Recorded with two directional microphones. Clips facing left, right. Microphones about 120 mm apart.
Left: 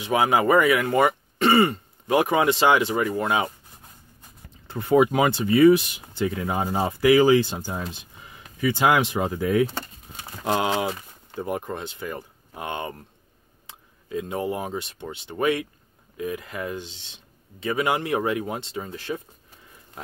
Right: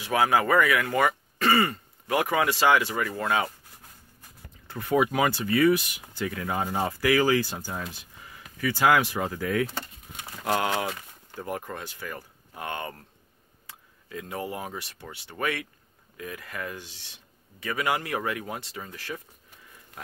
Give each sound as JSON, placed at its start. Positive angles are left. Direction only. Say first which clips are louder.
{"t": 0.0, "sound": "speech", "louder": "left 3 dB", "side_deg": 20}